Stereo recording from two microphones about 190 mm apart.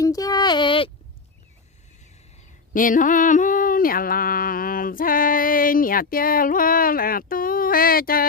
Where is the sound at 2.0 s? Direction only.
35° left (ahead or behind).